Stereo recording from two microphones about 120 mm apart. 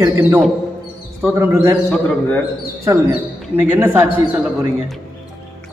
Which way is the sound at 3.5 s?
15° right (ahead or behind).